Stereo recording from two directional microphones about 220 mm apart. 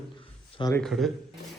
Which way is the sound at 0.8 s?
Centre (ahead or behind).